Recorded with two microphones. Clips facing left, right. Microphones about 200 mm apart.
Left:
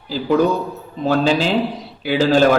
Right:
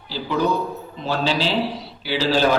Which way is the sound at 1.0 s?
50° left (ahead or behind).